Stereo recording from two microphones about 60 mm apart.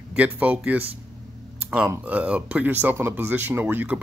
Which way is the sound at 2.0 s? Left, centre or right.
Right.